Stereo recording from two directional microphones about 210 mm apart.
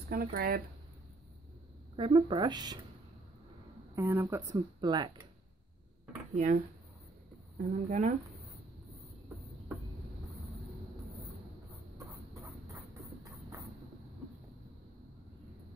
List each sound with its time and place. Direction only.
0.1 s speech: 45° right (ahead or behind)
2.0 s speech: 25° right (ahead or behind)
3.9 s speech: 10° right (ahead or behind)
6.3 s speech: 35° right (ahead or behind)
12.4 s a sound: 15° right (ahead or behind)